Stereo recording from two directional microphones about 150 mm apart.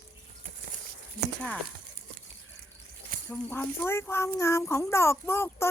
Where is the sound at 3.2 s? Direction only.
10° left (ahead or behind).